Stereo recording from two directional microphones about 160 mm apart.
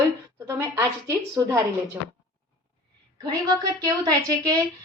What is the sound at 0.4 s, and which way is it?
Speech, 20° right (ahead or behind).